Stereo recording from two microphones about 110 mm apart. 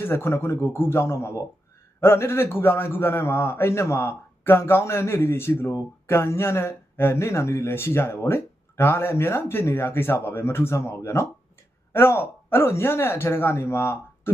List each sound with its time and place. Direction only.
0.0 s a man's voice: 20° left (ahead or behind)